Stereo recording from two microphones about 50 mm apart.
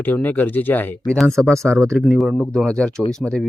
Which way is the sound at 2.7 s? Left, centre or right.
Centre.